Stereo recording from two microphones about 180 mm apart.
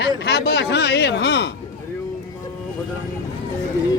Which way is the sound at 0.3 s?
65° left (ahead or behind).